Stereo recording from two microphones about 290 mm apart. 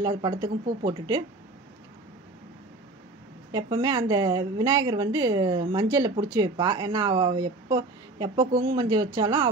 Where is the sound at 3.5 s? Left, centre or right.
Centre.